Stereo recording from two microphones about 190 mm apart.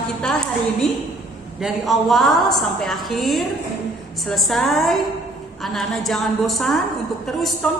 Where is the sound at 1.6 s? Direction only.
Centre (ahead or behind).